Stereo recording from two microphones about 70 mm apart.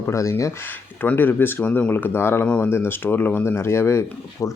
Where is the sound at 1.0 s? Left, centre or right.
Left.